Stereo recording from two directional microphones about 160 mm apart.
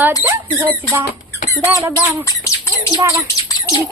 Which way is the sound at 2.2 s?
20° left (ahead or behind).